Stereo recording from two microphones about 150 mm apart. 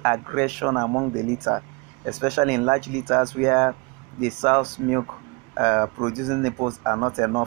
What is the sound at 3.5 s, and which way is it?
Speech, 40° right (ahead or behind).